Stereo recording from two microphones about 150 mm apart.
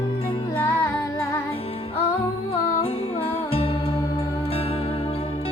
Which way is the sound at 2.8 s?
40° left (ahead or behind).